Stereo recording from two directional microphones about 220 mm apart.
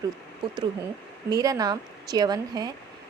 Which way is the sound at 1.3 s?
15° right (ahead or behind).